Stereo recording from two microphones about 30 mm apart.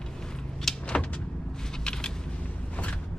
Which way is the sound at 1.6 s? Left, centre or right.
Left.